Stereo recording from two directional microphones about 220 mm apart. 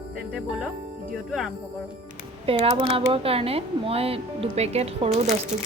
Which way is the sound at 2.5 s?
25° right (ahead or behind).